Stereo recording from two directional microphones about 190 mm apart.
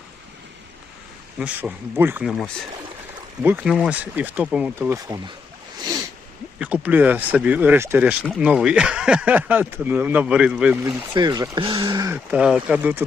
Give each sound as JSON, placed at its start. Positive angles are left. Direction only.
{"t": 1.4, "sound": "speech", "side_deg": -5}
{"t": 6.6, "sound": "speech", "side_deg": -10}
{"t": 11.1, "sound": "speech", "side_deg": -20}